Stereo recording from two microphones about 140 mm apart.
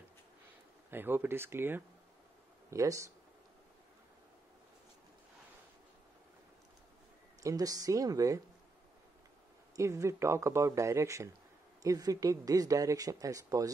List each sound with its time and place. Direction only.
0.8 s speech: 15° right (ahead or behind)
7.4 s speech: 25° right (ahead or behind)
9.8 s speech: 20° right (ahead or behind)